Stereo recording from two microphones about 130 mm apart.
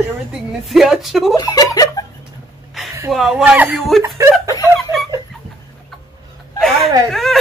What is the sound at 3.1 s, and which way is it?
Speech, centre (ahead or behind).